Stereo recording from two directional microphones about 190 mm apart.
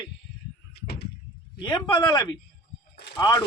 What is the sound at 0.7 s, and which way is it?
Door, 55° left (ahead or behind).